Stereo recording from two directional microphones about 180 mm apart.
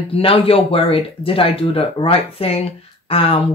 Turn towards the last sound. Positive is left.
turn(degrees=30)  # may be behind; listen again after turning